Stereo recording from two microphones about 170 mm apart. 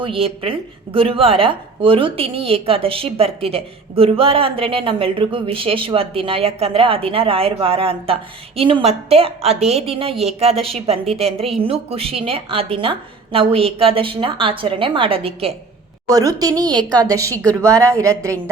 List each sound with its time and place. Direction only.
0.0 s speech: 30° right (ahead or behind)
16.0 s a woman's voice: 20° right (ahead or behind)
17.3 s speech: 10° left (ahead or behind)
17.7 s speech: 20° right (ahead or behind)